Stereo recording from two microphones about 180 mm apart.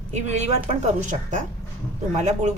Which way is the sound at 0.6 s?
45° right (ahead or behind).